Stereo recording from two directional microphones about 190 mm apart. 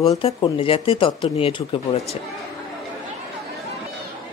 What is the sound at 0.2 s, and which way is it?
Speech, 30° left (ahead or behind).